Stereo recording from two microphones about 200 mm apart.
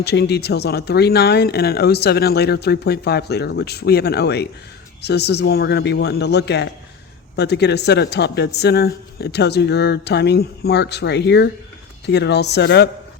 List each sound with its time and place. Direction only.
0.0 s speech: 55° left (ahead or behind)